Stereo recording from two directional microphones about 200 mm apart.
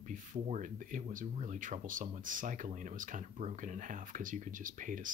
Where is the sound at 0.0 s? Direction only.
40° right (ahead or behind).